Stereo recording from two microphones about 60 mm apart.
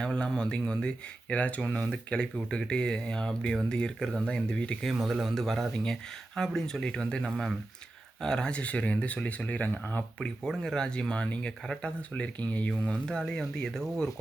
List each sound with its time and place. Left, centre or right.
0.0 s a man's voice: centre
4.8 s speech: centre; by 10.0 s left
10.2 s speech: centre